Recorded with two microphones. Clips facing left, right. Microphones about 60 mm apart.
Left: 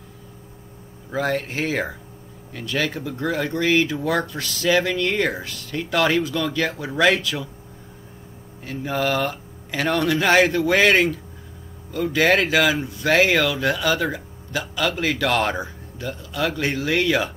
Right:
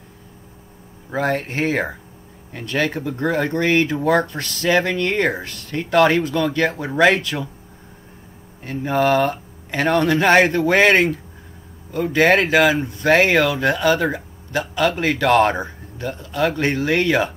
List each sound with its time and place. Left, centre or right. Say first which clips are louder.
1.1 s speech: right 2 dB; right
3.6 s speech: right 1 dB; right
3.9 s speech: right 5 dB; right
8.6 s speech: right 5 dB; right
9.3 s a sound: right 3 dB; right
9.9 s speech: right 3 dB; right
10.9 s speech: right 2 dB; right
15.3 s speech: right 6 dB; right